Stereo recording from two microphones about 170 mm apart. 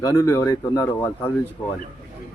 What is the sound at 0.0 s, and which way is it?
Speech, 20° left (ahead or behind).